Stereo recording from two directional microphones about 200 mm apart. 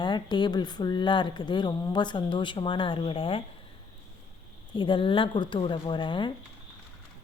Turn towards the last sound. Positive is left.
turn(degrees=25)  # may be behind; listen again after turning